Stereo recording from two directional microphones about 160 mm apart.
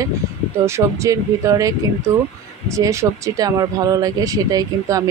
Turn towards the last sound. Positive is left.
turn(degrees=-20)  # may be behind; listen again after turning